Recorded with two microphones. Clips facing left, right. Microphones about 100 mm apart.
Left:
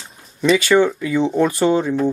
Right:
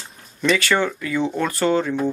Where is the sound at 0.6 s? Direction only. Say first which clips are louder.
Left 6 dB; 15° left (ahead or behind).